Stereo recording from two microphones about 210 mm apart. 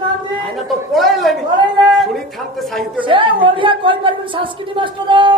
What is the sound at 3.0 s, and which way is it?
A woman's voice, 25° right (ahead or behind).